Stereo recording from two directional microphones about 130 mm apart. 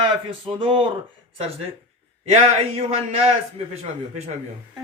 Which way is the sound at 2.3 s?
55° right (ahead or behind).